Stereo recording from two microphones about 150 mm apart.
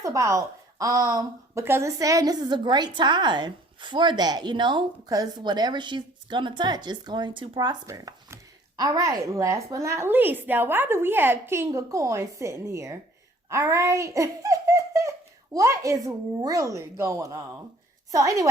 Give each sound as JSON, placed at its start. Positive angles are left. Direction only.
{"t": 0.0, "sound": "a woman's voice", "side_deg": -20}